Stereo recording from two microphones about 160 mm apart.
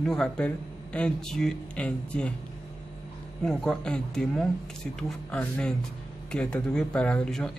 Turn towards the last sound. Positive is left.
turn(degrees=5)  # may be behind; listen again after turning